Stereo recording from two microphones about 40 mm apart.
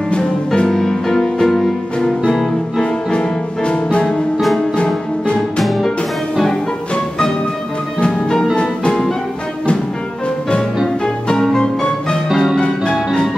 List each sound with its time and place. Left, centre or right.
0.7 s music: centre
2.8 s music: left
4.4 s music: centre
8.1 s music: centre
11.5 s music: left
12.3 s music: centre
12.5 s music: centre